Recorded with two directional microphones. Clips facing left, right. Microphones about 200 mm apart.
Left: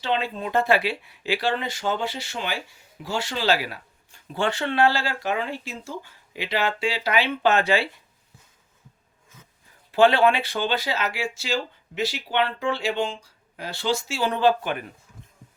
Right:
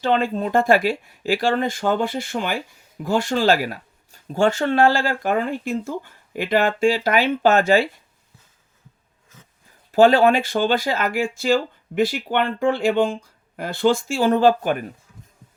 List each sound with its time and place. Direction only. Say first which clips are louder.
0.0 s speech: right 6 dB; 45° right (ahead or behind)
9.9 s speech: right 4 dB; 40° right (ahead or behind)